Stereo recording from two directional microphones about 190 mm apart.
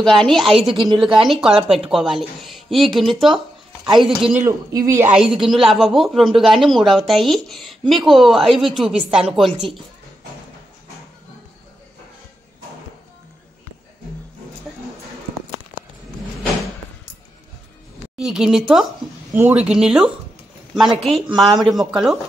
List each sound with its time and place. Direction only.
0.0 s a woman's voice: centre (ahead or behind)
0.7 s a woman's voice: 25° right (ahead or behind)
1.2 s a woman's voice: centre (ahead or behind)
4.5 s a woman's voice: 15° right (ahead or behind)
18.1 s a woman's voice: 5° right (ahead or behind)